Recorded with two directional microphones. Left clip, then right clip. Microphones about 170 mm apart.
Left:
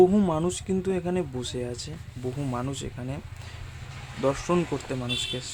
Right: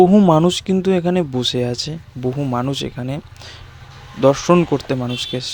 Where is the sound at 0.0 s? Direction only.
35° right (ahead or behind).